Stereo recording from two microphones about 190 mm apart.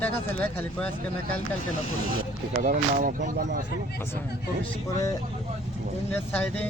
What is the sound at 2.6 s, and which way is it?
Speech, 45° right (ahead or behind).